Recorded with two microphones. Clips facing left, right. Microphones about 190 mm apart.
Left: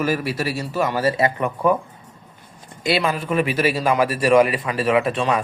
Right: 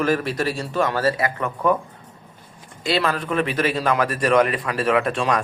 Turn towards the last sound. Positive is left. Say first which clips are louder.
# left 1 dB
turn(degrees=5)  # may be behind; listen again after turning